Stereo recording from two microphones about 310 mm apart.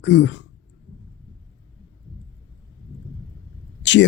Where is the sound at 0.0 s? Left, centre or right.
Left.